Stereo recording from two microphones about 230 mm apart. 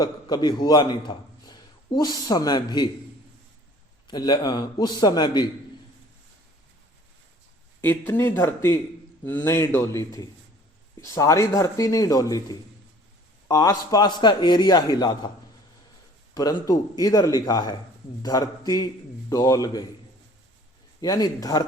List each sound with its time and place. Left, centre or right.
0.0 s a man's voice: centre
4.0 s speech: centre
7.8 s a man's voice: centre
16.3 s speech: centre
21.0 s speech: centre